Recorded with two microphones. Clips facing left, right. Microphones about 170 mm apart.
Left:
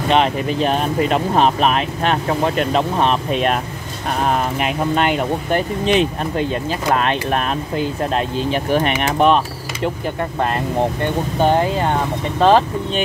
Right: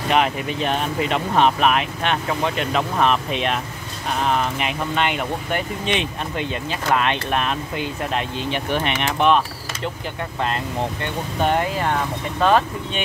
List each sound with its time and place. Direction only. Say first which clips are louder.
0.1 s speech: left 3 dB; 30° left (ahead or behind)
11.4 s speech: left 4 dB; 25° left (ahead or behind)